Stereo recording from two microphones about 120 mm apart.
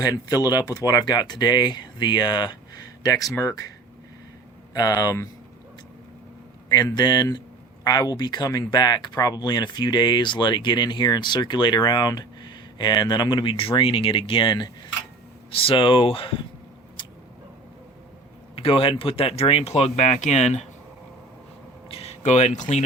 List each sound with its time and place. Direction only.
0.0 s speech: 30° left (ahead or behind)
4.7 s speech: 30° left (ahead or behind)
6.7 s speech: 35° left (ahead or behind)
17.0 s a sound: 40° left (ahead or behind)
18.5 s speech: 50° left (ahead or behind)
21.8 s a sound: 55° left (ahead or behind)
22.2 s speech: 70° left (ahead or behind)
22.5 s speech: 90° left